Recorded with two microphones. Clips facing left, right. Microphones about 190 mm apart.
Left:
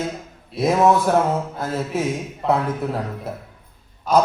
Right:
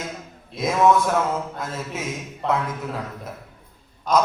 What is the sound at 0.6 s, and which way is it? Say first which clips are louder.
A man's voice: left 2 dB; 35° left (ahead or behind).